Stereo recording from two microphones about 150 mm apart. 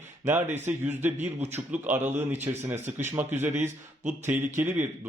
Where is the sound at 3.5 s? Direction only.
55° right (ahead or behind).